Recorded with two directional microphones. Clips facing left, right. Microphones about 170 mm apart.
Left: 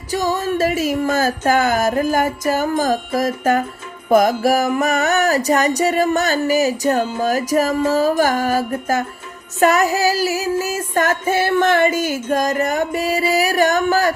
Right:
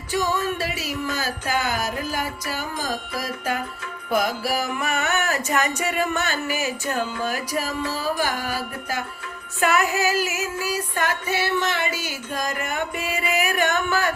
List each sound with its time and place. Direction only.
0.1 s music: 40° left (ahead or behind)
4.1 s female singing: 45° left (ahead or behind)
7.2 s music: 40° left (ahead or behind)
9.6 s female singing: 40° left (ahead or behind)